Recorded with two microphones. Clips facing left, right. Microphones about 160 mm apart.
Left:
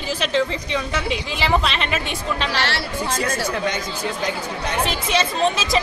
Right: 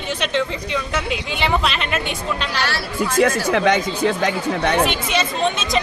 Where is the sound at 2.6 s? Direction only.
25° left (ahead or behind).